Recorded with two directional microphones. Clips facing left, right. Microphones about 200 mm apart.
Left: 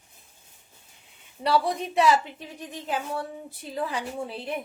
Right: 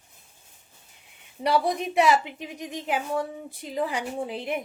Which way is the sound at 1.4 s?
15° right (ahead or behind).